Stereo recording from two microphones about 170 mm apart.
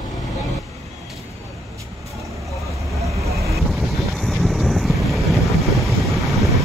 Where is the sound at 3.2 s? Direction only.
20° right (ahead or behind).